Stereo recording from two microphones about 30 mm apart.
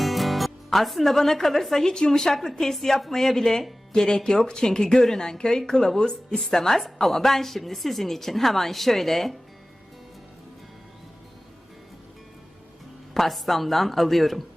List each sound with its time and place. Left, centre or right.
0.0 s a woman's voice: centre
13.1 s a woman's voice: centre